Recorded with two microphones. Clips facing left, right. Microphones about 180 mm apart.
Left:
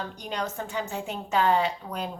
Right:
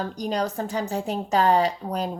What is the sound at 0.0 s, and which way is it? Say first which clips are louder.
A woman's voice: right 6 dB; 35° right (ahead or behind).